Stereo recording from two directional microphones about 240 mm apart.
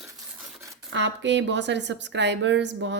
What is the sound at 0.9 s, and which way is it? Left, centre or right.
A woman's voice, right.